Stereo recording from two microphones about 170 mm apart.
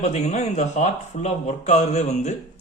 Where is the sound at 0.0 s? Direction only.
40° left (ahead or behind).